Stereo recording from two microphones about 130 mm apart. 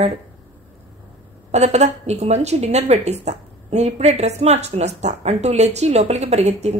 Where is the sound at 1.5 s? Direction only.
55° right (ahead or behind).